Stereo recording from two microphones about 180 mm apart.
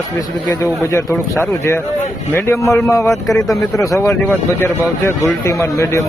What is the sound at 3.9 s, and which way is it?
A man's voice, 15° left (ahead or behind).